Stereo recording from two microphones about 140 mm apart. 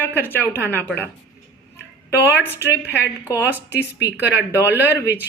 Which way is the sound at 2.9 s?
20° left (ahead or behind).